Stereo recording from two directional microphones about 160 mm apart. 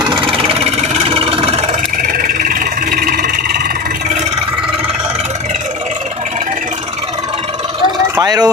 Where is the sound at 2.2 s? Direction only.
60° right (ahead or behind).